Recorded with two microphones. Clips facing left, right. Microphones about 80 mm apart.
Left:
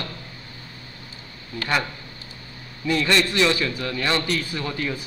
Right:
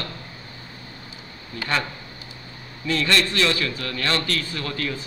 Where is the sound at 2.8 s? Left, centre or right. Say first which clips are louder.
Left 1 dB; centre.